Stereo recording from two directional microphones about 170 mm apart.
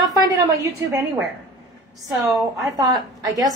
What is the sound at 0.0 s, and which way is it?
A woman's voice, 20° right (ahead or behind).